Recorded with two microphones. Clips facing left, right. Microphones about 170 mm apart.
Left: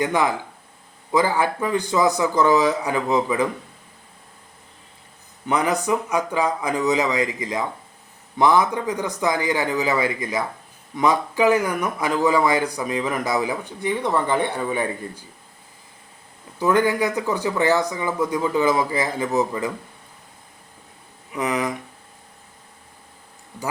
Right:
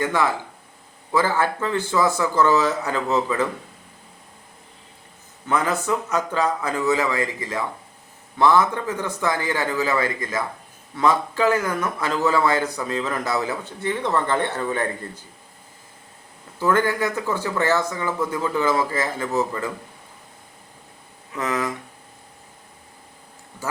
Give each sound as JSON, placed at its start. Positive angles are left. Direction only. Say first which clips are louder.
{"t": 0.0, "sound": "speech", "louder": "left 1 dB", "side_deg": 15}
{"t": 5.5, "sound": "speech", "louder": "left 1 dB", "side_deg": 15}
{"t": 16.6, "sound": "speech", "louder": "left 2 dB", "side_deg": 15}
{"t": 21.3, "sound": "speech", "louder": "left 2 dB", "side_deg": 15}